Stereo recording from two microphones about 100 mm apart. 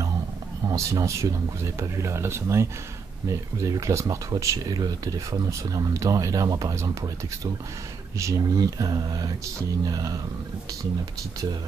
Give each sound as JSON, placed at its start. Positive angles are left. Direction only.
{"t": 0.7, "sound": "speech", "side_deg": -35}
{"t": 8.2, "sound": "speech", "side_deg": -35}